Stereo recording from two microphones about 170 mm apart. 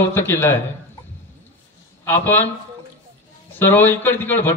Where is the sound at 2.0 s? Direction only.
10° left (ahead or behind).